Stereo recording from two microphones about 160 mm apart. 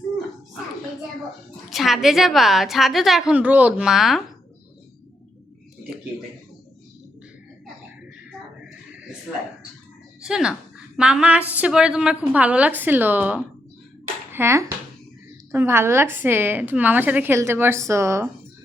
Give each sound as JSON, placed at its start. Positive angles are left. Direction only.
{"t": 1.7, "sound": "a woman's voice", "side_deg": 0}
{"t": 10.2, "sound": "a woman's voice", "side_deg": -5}